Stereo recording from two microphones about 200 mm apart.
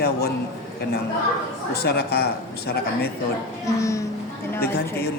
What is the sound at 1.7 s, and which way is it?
A man's voice, 55° left (ahead or behind).